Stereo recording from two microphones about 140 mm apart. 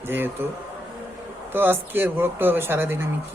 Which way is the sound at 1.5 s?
15° right (ahead or behind).